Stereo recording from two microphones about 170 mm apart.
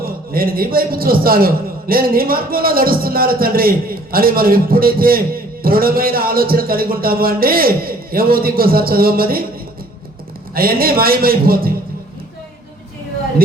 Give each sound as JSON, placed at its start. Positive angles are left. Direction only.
{"t": 0.0, "sound": "a man's voice", "side_deg": -60}
{"t": 10.5, "sound": "a man's voice", "side_deg": -60}